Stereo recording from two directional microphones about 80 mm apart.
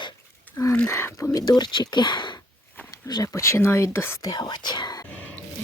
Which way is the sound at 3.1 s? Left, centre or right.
Left.